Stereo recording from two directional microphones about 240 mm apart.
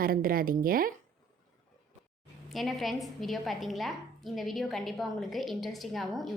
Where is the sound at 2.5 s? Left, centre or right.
Centre.